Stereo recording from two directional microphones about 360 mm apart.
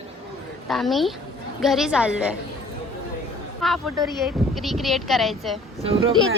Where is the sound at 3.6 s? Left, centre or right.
Centre.